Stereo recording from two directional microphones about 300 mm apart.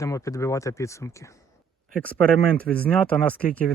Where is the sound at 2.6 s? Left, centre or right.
Centre.